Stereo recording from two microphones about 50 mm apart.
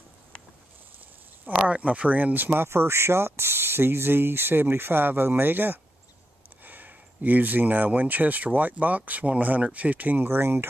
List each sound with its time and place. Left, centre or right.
1.5 s speech: right
2.7 s speech: right